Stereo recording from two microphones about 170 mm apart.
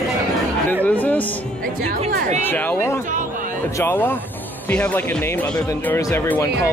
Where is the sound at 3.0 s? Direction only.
50° right (ahead or behind).